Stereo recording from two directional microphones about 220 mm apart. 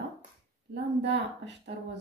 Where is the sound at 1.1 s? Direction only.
50° right (ahead or behind).